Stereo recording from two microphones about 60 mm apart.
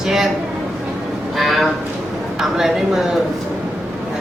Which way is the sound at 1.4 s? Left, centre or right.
Centre.